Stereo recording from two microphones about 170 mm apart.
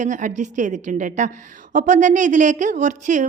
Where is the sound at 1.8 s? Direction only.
45° right (ahead or behind).